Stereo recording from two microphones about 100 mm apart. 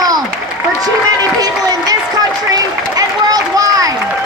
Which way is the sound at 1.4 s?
40° right (ahead or behind).